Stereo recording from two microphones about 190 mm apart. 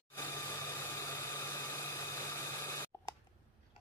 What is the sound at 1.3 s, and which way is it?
Engine, 15° left (ahead or behind).